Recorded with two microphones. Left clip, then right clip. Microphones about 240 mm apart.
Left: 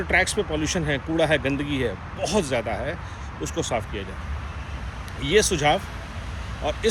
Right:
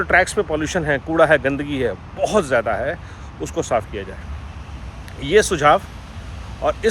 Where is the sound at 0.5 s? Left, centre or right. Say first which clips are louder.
Right 5 dB; right.